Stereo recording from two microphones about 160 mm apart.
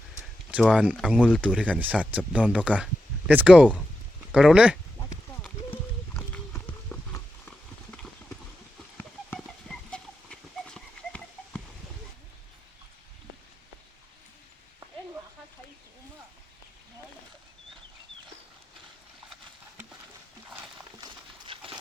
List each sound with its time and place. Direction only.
0.5 s speech: 5° right (ahead or behind)
6.1 s clip-clop: 10° left (ahead or behind)
9.0 s horse: 5° left (ahead or behind)
21.0 s horse: 30° right (ahead or behind)